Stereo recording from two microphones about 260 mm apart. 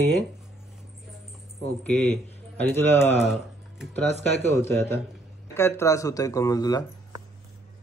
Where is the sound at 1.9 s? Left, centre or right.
Right.